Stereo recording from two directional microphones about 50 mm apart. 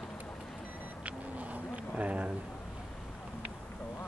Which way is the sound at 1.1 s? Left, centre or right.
Right.